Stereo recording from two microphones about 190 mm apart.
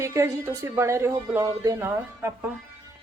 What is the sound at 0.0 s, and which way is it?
Speech, 15° right (ahead or behind).